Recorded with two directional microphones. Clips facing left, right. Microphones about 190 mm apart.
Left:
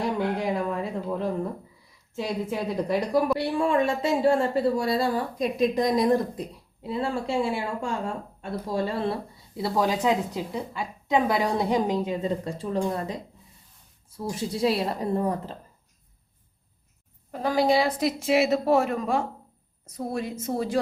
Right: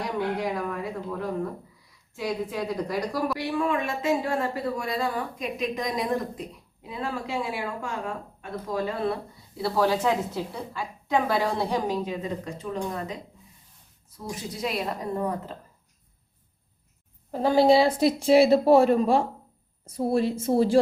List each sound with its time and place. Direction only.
0.4 s a sound: 25° left (ahead or behind)
2.1 s a woman's voice: 25° left (ahead or behind)
9.6 s a woman's voice: 20° left (ahead or behind)
14.3 s speech: 30° left (ahead or behind)
17.3 s speech: 25° right (ahead or behind)